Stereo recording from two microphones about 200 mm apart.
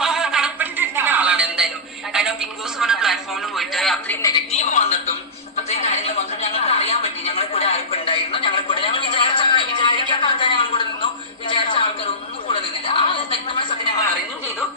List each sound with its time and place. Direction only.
0.0 s a sound: centre (ahead or behind)
4.2 s a woman's voice: 20° left (ahead or behind)
4.5 s speech: 35° left (ahead or behind)
5.6 s television: 35° left (ahead or behind)
6.7 s music: 30° left (ahead or behind)
11.4 s a sound: 25° left (ahead or behind)